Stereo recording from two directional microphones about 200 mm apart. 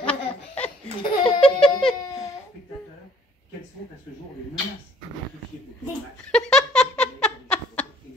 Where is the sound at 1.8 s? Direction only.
5° left (ahead or behind).